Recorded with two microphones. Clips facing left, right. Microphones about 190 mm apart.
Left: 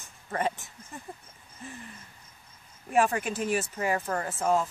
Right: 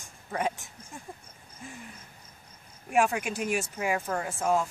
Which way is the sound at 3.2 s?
15° right (ahead or behind).